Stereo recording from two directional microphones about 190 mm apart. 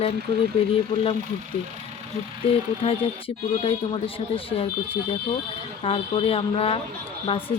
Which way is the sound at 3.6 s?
30° left (ahead or behind).